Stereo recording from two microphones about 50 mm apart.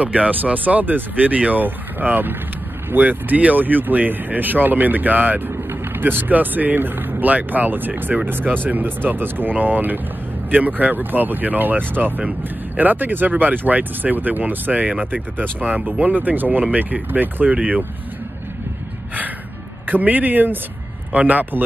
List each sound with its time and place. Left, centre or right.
0.0 s speech: right
5.5 s speech: right
19.9 s speech: right